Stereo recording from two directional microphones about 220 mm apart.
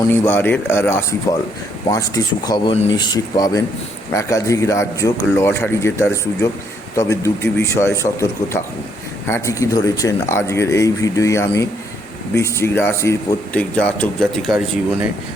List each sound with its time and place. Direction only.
0.0 s speech: 10° left (ahead or behind)